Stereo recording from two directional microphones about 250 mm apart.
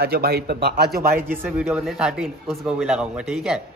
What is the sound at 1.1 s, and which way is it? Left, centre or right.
A man's voice, centre.